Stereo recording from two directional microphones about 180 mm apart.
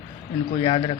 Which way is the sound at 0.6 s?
30° left (ahead or behind).